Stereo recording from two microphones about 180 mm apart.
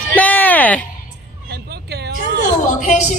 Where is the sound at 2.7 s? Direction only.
45° left (ahead or behind).